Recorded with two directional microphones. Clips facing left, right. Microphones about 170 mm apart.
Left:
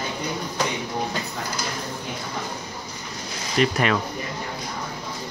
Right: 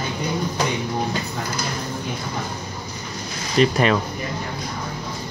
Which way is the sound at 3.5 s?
30° right (ahead or behind).